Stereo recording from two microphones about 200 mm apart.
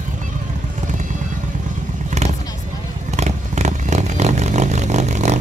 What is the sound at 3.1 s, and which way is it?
Vehicle, 35° right (ahead or behind).